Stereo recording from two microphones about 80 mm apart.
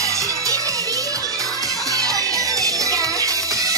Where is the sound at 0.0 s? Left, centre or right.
Right.